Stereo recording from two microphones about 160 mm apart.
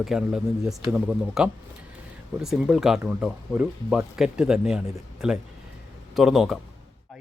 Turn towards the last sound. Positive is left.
turn(degrees=0)  # may be behind; listen again after turning